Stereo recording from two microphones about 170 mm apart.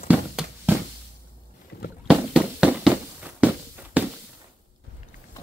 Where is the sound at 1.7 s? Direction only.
70° left (ahead or behind).